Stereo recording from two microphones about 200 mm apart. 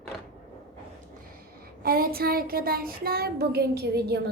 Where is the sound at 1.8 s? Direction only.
50° right (ahead or behind).